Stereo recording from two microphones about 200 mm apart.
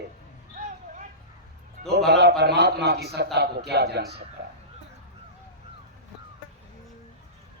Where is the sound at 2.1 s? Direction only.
55° right (ahead or behind).